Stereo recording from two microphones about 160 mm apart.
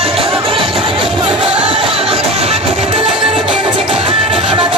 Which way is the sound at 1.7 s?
35° right (ahead or behind).